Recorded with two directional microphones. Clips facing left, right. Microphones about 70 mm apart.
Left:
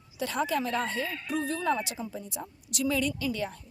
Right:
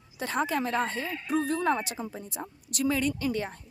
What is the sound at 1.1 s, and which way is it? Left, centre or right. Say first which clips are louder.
Speech: right 2 dB; centre.